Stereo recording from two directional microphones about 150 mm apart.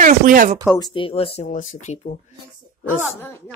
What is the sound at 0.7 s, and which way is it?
Speech, 30° left (ahead or behind).